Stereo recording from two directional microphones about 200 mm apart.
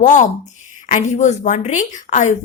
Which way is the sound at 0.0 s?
40° left (ahead or behind).